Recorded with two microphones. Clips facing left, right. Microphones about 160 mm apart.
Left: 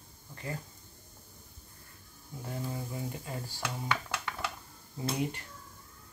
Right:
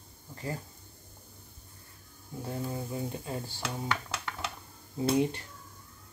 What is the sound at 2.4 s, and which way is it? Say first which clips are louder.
Speech: right 2 dB; 25° right (ahead or behind).